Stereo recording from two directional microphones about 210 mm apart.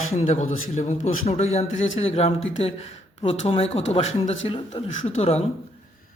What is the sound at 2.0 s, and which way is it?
Speech, 30° left (ahead or behind).